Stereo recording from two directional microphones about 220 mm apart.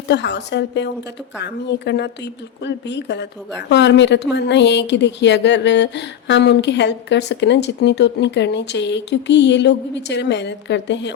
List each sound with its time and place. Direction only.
0.1 s a woman's voice: 50° left (ahead or behind)